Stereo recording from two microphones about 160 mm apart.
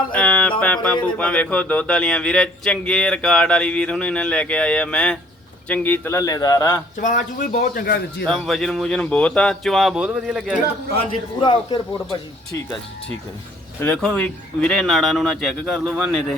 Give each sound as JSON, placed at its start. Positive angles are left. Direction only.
{"t": 0.1, "sound": "music", "side_deg": 10}
{"t": 0.6, "sound": "speech", "side_deg": 5}
{"t": 6.9, "sound": "speech", "side_deg": 50}
{"t": 7.8, "sound": "speech", "side_deg": 65}
{"t": 8.2, "sound": "speech", "side_deg": 0}
{"t": 10.9, "sound": "a man's voice", "side_deg": 30}
{"t": 13.8, "sound": "speech", "side_deg": 5}